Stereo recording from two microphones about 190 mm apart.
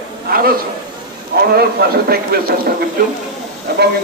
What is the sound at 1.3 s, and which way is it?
A man's voice, 55° right (ahead or behind).